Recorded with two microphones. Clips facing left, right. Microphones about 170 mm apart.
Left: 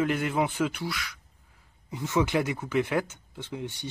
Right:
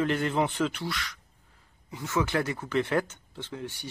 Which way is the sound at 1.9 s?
20° left (ahead or behind).